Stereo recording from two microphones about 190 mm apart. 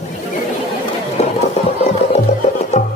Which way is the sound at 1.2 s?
35° left (ahead or behind).